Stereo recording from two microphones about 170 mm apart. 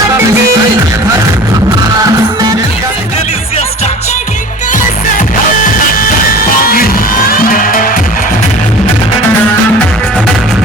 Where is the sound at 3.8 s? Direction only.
45° left (ahead or behind).